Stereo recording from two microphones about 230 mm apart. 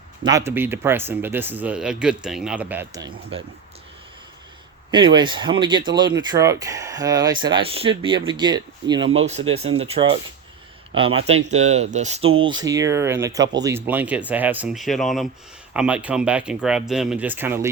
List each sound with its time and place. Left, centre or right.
0.2 s speech: centre
4.9 s speech: centre
12.4 s speech: centre